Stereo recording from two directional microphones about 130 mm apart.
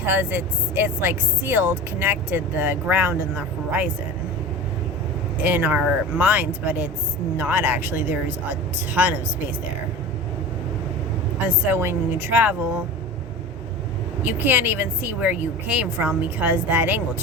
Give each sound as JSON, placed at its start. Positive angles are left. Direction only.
{"t": 0.0, "sound": "speech", "side_deg": -15}
{"t": 5.4, "sound": "speech", "side_deg": -15}
{"t": 11.4, "sound": "speech", "side_deg": -20}
{"t": 14.2, "sound": "speech", "side_deg": -15}